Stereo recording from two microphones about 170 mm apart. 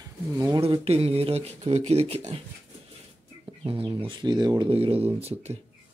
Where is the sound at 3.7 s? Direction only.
30° right (ahead or behind).